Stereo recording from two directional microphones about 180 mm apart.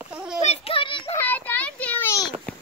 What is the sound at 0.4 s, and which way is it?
Children playing, 35° left (ahead or behind).